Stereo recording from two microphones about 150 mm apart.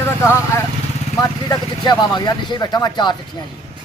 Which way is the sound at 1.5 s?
25° left (ahead or behind).